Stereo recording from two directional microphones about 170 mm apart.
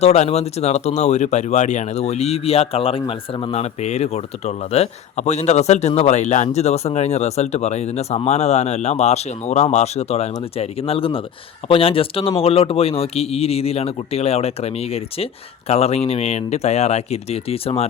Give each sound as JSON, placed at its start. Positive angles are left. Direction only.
{"t": 0.0, "sound": "speech", "side_deg": 40}